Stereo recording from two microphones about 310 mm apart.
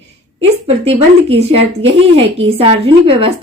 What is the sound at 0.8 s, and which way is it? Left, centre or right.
A woman's voice, centre.